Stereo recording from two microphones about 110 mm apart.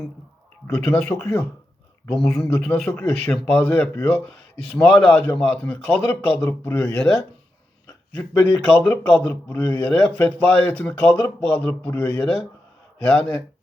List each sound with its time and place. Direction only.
1.0 s speech: 20° left (ahead or behind)
2.0 s a man's voice: 5° left (ahead or behind)